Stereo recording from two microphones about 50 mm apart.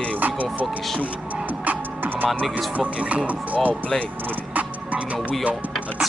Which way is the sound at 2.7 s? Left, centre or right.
Right.